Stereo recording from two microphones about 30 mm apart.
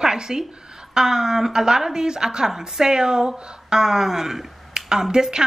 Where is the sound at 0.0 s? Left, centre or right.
Right.